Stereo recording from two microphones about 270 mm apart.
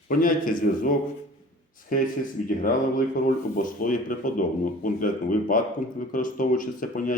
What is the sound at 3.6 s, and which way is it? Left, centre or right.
Speech, left.